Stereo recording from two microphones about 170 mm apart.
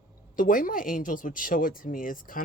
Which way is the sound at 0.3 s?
55° left (ahead or behind).